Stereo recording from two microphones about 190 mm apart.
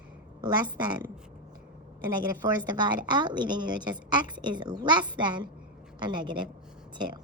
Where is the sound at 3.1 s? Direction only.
25° right (ahead or behind).